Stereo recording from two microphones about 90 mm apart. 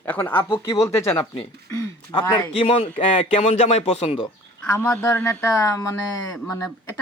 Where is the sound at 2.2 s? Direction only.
75° left (ahead or behind); by 3.4 s 90° left.